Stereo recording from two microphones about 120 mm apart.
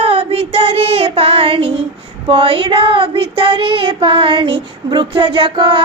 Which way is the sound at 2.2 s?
50° right (ahead or behind).